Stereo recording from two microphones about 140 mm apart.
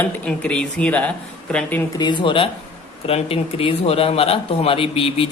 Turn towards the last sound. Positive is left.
turn(degrees=40)  # may be behind; listen again after turning